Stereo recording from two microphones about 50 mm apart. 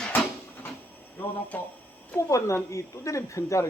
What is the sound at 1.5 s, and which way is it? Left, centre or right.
Speech, left.